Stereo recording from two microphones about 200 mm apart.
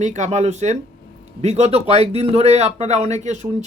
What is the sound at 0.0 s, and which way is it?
Speech, 35° right (ahead or behind).